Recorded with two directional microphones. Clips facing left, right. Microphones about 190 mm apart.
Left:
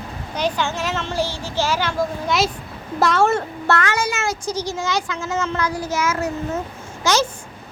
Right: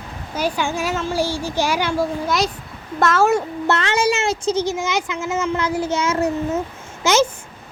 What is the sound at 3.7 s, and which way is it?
Speech, 25° right (ahead or behind).